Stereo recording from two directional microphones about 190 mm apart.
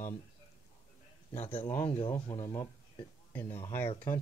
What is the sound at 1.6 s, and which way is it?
Speech, 10° left (ahead or behind).